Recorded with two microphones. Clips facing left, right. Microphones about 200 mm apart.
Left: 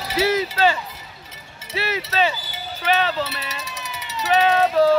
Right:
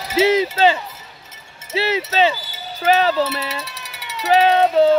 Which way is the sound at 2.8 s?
35° right (ahead or behind).